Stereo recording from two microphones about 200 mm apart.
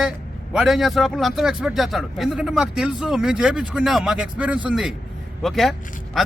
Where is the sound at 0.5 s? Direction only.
Centre (ahead or behind).